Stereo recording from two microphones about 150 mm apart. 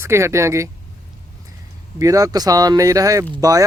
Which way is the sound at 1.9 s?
25° right (ahead or behind).